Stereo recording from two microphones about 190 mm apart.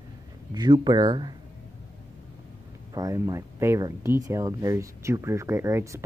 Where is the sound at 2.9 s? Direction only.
20° right (ahead or behind).